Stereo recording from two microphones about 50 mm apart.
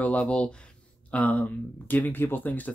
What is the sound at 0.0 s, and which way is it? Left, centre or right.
Speech, left.